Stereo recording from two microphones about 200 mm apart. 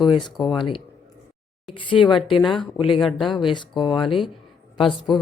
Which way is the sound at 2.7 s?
25° left (ahead or behind).